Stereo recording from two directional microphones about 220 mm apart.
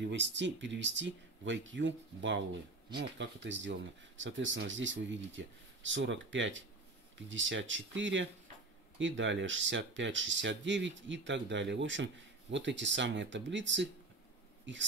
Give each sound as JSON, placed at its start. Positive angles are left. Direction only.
{"t": 0.0, "sound": "speech", "side_deg": -55}